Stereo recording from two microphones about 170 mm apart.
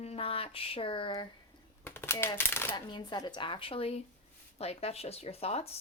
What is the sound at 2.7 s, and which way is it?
Speech, 25° left (ahead or behind).